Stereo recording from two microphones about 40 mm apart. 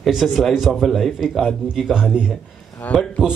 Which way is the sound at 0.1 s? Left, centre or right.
Centre.